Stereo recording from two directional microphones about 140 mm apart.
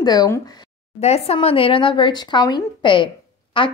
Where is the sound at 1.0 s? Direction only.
50° left (ahead or behind).